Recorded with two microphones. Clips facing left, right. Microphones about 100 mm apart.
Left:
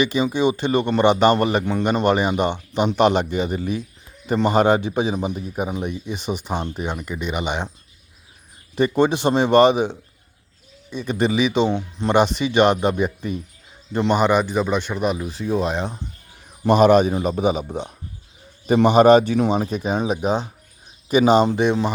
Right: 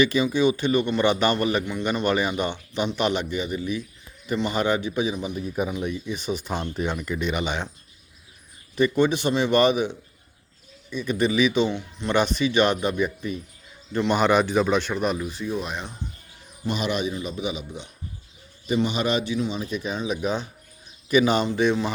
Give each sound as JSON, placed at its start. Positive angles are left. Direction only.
{"t": 0.0, "sound": "a man's voice", "side_deg": 20}
{"t": 8.7, "sound": "a man's voice", "side_deg": 30}
{"t": 14.2, "sound": "speech", "side_deg": 10}
{"t": 15.2, "sound": "a man's voice", "side_deg": 35}
{"t": 16.6, "sound": "a man's voice", "side_deg": 45}
{"t": 19.6, "sound": "a man's voice", "side_deg": 35}
{"t": 21.6, "sound": "a man's voice", "side_deg": 25}